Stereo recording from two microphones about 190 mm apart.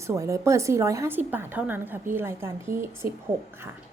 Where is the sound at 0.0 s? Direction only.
15° right (ahead or behind).